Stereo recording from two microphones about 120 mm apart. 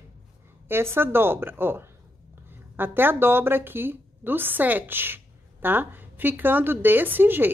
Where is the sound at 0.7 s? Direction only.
20° right (ahead or behind).